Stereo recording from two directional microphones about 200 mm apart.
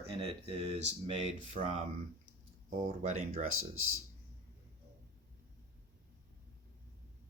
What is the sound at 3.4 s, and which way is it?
Speech, 90° right.